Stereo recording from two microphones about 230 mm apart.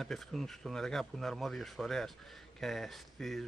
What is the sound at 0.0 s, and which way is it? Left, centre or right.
Speech, centre.